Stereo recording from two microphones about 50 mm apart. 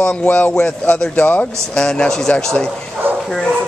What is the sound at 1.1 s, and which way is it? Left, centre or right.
Speech, left.